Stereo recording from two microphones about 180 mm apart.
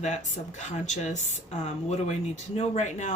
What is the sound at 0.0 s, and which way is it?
A woman's voice, 40° left (ahead or behind).